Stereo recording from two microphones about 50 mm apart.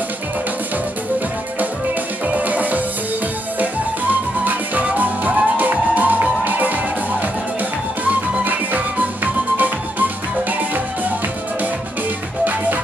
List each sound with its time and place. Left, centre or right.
2.2 s music: right
4.1 s music: right